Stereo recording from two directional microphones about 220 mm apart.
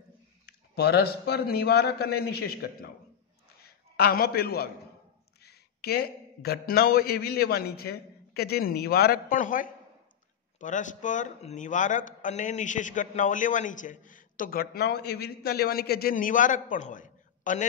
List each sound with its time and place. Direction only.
0.5 s a man's voice: 45° left (ahead or behind)